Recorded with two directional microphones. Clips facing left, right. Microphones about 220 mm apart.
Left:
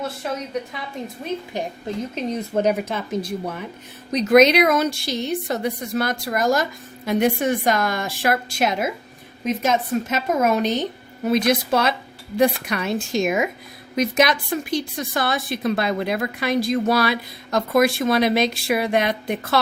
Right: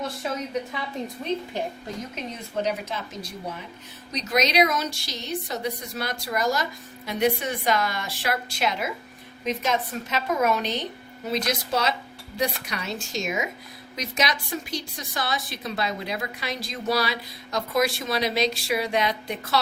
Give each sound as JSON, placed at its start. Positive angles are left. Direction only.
{"t": 0.7, "sound": "a woman's voice", "side_deg": 0}
{"t": 2.6, "sound": "a woman's voice", "side_deg": 50}